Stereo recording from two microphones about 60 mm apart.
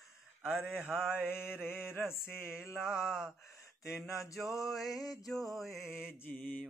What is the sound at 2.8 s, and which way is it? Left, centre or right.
Mantra, centre.